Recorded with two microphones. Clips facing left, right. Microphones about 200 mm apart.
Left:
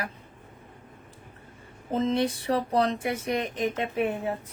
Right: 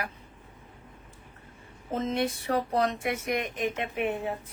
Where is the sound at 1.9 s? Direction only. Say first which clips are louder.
Left 3 dB; 30° left (ahead or behind).